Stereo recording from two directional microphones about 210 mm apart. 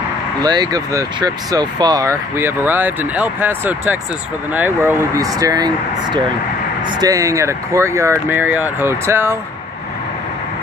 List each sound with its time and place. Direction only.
0.4 s speech: 20° right (ahead or behind)